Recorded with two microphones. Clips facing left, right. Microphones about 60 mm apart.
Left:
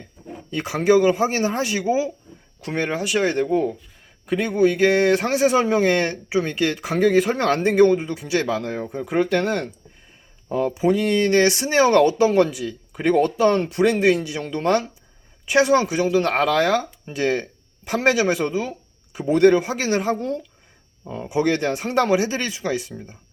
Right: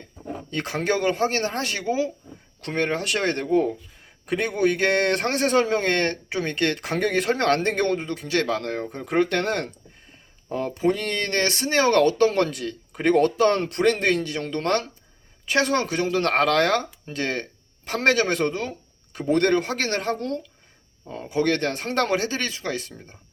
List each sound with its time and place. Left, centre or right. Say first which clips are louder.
0.2 s a sound: right 4 dB; right
0.5 s a man's voice: left 7 dB; centre
17.1 s speech: left 7 dB; centre